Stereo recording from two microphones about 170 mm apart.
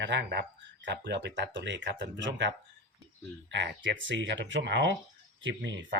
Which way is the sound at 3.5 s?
90° right.